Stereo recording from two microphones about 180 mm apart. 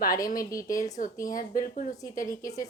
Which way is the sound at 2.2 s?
20° left (ahead or behind).